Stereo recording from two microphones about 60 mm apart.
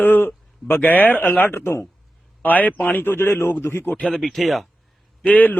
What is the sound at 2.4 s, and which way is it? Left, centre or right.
A man's voice, left.